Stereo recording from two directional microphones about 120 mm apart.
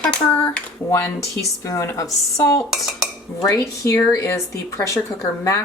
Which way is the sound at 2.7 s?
5° right (ahead or behind).